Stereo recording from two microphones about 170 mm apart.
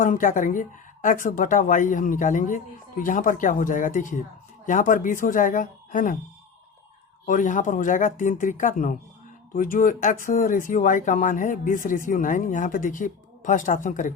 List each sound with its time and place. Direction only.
0.0 s speech: 50° left (ahead or behind)
7.3 s speech: 50° left (ahead or behind)